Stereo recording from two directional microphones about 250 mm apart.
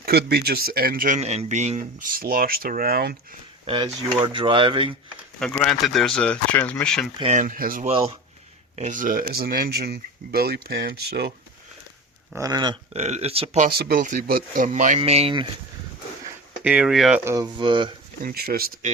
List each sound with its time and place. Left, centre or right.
0.0 s speech: right
3.7 s speech: centre
5.4 s speech: centre
7.2 s speech: right
12.3 s speech: centre
13.7 s speech: right
16.2 s speech: centre
17.3 s speech: centre
18.2 s speech: right